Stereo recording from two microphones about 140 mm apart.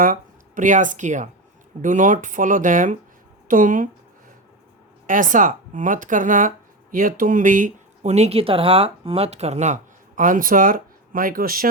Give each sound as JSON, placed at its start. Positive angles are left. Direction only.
{"t": 0.0, "sound": "speech", "side_deg": -75}
{"t": 5.0, "sound": "speech", "side_deg": -70}